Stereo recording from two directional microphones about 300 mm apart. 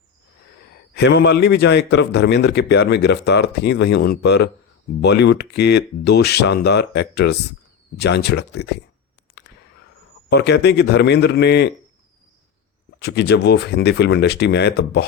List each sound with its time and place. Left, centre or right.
0.9 s a man's voice: left
10.2 s a man's voice: left
13.0 s a man's voice: left